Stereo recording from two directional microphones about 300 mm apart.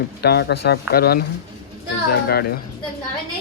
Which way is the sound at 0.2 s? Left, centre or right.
Left.